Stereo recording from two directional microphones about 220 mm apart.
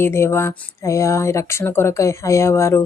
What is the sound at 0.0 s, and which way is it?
Speech, 10° left (ahead or behind).